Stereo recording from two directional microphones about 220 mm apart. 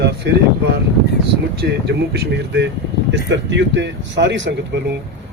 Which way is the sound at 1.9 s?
50° right (ahead or behind).